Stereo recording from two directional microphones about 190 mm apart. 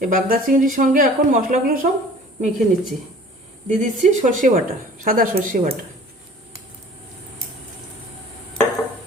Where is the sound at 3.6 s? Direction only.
40° right (ahead or behind).